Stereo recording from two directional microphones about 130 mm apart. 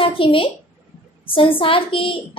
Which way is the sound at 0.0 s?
40° left (ahead or behind).